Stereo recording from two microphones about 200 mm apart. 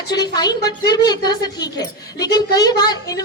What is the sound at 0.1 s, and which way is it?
A woman's voice, 20° left (ahead or behind).